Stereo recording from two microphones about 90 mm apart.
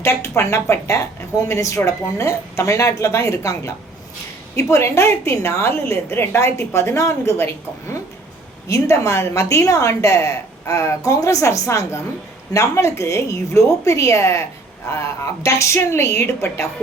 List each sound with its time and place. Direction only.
0.0 s a woman's voice: 30° left (ahead or behind)